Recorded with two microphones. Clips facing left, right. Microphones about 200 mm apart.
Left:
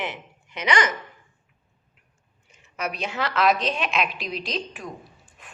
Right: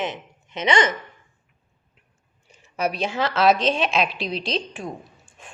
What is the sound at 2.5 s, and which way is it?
A woman's voice, 30° right (ahead or behind).